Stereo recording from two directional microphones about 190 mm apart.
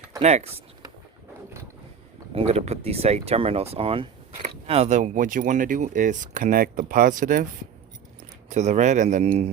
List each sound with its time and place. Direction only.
0.2 s speech: 35° right (ahead or behind)
2.3 s speech: 35° right (ahead or behind)
8.4 s speech: 35° right (ahead or behind)